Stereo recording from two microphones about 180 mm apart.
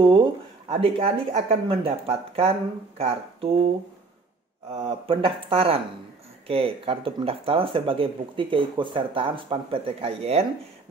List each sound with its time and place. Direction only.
0.0 s speech: 30° right (ahead or behind)
4.7 s speech: 30° right (ahead or behind)